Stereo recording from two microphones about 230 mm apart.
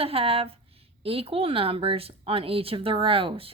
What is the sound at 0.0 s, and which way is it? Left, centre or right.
A woman's voice, right.